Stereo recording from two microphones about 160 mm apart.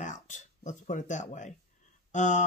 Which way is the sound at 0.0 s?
50° left (ahead or behind).